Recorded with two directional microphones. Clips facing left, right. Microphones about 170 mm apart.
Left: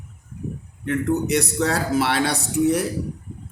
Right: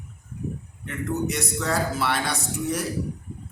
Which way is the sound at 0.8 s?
70° left (ahead or behind).